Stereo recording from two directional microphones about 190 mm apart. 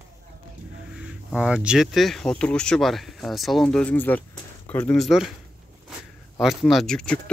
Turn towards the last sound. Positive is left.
turn(degrees=5)  # may be behind; listen again after turning